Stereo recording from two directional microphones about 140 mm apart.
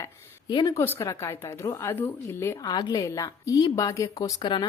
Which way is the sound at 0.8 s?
20° left (ahead or behind).